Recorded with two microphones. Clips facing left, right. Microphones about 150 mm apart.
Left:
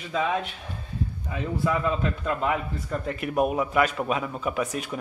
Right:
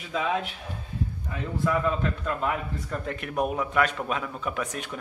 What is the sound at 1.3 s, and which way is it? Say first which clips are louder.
A man's voice: left 1 dB; 5° left (ahead or behind).